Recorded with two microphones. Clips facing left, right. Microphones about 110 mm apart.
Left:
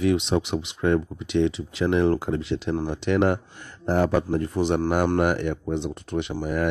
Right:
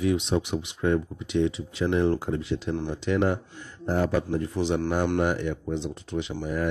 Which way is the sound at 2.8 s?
70° left (ahead or behind).